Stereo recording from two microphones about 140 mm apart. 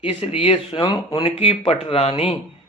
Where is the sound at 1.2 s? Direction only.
45° left (ahead or behind).